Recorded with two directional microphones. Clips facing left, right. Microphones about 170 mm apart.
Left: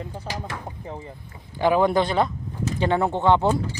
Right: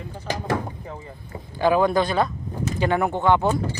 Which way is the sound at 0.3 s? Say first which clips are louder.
Right 10 dB; 50° right (ahead or behind).